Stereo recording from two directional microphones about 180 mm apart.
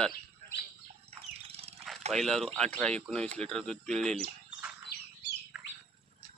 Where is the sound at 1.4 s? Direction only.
35° right (ahead or behind).